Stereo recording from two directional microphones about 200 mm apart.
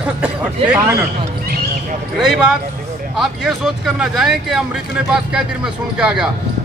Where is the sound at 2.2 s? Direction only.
5° right (ahead or behind).